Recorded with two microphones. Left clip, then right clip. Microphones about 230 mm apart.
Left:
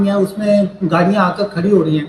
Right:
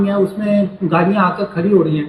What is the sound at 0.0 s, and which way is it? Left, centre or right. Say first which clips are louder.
A man's voice: left 1 dB; left.